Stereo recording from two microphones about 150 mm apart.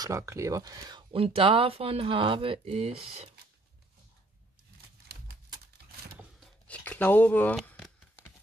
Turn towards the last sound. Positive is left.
turn(degrees=0)  # may be behind; listen again after turning